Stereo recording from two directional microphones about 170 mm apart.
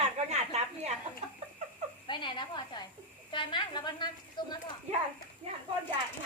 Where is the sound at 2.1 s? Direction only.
25° left (ahead or behind).